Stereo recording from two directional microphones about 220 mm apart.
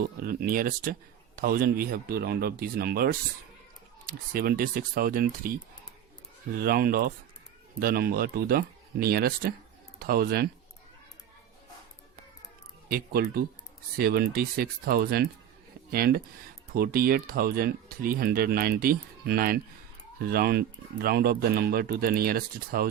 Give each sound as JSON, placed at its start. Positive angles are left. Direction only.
{"t": 0.2, "sound": "speech", "side_deg": -45}
{"t": 6.6, "sound": "speech", "side_deg": -45}
{"t": 13.2, "sound": "speech", "side_deg": -45}